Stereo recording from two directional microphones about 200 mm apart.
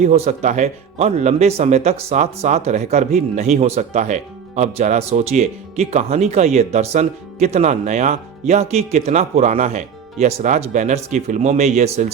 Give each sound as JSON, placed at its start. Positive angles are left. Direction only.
{"t": 0.0, "sound": "speech", "side_deg": -35}